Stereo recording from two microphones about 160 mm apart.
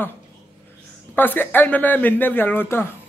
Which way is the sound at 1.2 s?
10° left (ahead or behind).